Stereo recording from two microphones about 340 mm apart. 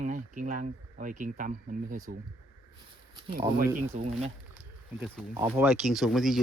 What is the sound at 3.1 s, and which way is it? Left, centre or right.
Speech, centre.